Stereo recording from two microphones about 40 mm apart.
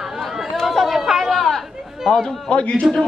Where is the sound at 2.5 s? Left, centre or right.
Left.